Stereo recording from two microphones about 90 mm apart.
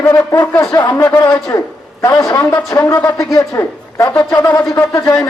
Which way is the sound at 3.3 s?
35° left (ahead or behind).